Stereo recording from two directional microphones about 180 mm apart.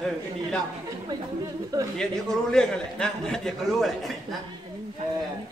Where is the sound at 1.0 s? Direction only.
20° right (ahead or behind).